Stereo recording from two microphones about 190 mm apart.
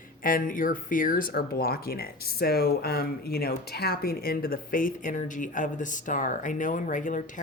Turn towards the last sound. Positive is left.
turn(degrees=45)  # may be behind; listen again after turning